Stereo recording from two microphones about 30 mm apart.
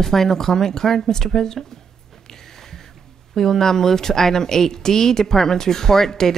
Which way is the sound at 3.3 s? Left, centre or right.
Centre.